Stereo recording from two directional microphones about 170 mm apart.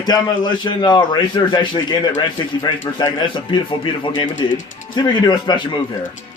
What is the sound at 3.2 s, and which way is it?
A man's voice, 30° left (ahead or behind).